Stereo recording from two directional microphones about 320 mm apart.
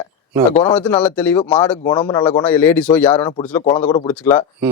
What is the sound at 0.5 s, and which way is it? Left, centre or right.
A man's voice, centre.